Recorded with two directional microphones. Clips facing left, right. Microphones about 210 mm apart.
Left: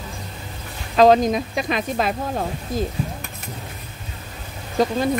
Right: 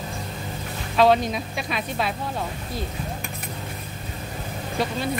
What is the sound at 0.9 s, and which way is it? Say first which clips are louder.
Speech: left 5 dB; 40° left (ahead or behind).